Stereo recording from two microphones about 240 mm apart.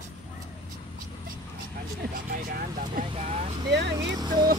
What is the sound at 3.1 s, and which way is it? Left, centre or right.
Vehicle, right.